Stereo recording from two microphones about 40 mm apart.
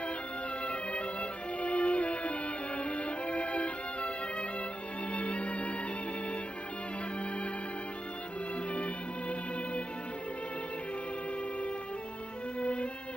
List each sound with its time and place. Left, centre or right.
1.6 s music: left
8.7 s music: left
12.5 s music: left